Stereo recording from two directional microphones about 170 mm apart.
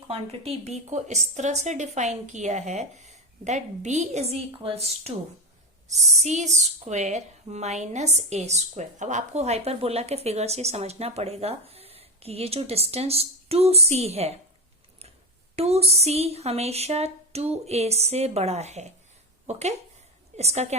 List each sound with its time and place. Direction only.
0.1 s a woman's voice: 35° right (ahead or behind)
15.5 s a woman's voice: 35° right (ahead or behind)